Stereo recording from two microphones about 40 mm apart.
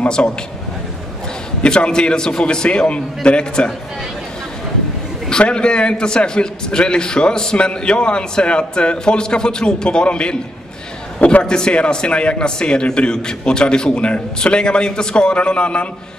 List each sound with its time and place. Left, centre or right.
0.2 s a man's voice: left
1.6 s a man's voice: left
5.4 s a man's voice: left
11.4 s a man's voice: left